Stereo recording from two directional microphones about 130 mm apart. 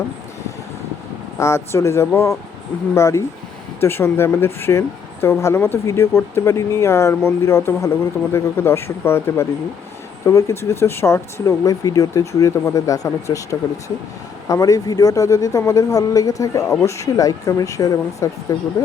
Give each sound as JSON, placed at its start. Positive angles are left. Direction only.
{"t": 1.4, "sound": "speech", "side_deg": 20}